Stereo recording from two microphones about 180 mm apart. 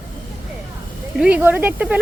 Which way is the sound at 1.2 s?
10° right (ahead or behind).